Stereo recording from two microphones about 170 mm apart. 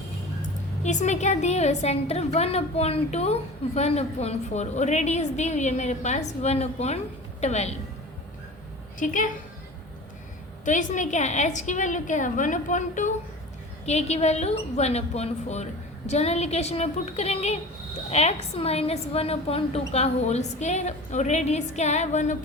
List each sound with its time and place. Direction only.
0.8 s a woman's voice: 45° left (ahead or behind)
9.0 s a woman's voice: 50° left (ahead or behind)
10.7 s a woman's voice: 45° left (ahead or behind)